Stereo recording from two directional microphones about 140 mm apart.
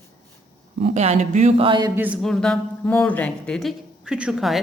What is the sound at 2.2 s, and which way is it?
Speech, 5° left (ahead or behind).